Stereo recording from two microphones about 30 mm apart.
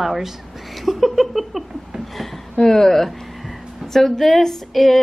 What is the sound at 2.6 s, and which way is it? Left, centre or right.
Speech, centre.